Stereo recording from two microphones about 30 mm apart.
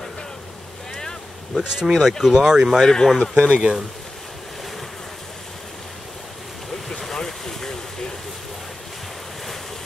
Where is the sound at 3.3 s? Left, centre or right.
Right.